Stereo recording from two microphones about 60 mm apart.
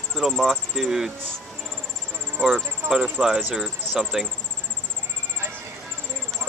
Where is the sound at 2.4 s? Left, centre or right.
Centre.